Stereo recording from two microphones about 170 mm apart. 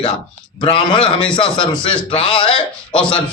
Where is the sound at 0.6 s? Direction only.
30° left (ahead or behind).